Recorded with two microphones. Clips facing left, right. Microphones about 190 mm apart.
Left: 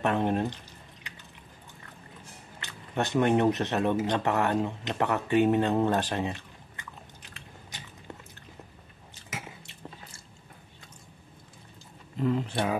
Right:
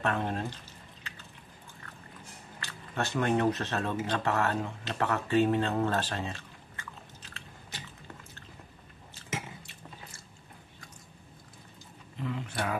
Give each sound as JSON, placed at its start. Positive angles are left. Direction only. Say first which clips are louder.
{"t": 0.0, "sound": "speech", "louder": "left 5 dB", "side_deg": 20}
{"t": 2.6, "sound": "speech", "louder": "left 4 dB", "side_deg": 20}
{"t": 12.2, "sound": "speech", "louder": "left 9 dB", "side_deg": 40}